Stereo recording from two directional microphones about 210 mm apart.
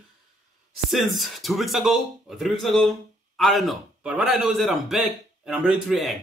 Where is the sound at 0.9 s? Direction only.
Centre (ahead or behind).